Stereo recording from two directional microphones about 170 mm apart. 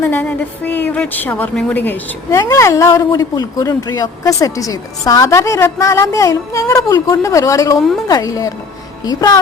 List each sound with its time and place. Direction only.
0.0 s music: 10° left (ahead or behind)
0.9 s a woman's voice: 10° left (ahead or behind)